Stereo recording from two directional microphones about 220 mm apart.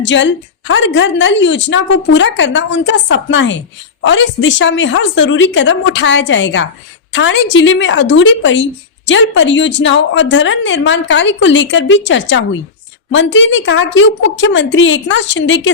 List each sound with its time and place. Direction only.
0.0 s a woman's voice: 55° left (ahead or behind)